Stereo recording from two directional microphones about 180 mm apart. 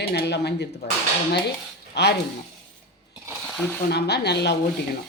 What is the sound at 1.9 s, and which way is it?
Speech, 70° left (ahead or behind).